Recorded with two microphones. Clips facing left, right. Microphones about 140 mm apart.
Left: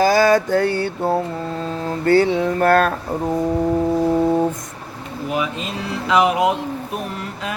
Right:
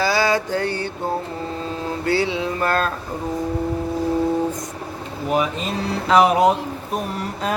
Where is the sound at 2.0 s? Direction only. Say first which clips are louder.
Left 7 dB; 50° left (ahead or behind).